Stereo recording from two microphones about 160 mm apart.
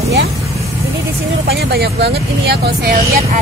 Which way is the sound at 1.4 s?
85° right.